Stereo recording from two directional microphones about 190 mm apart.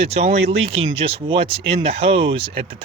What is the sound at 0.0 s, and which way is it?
Speech, 35° right (ahead or behind).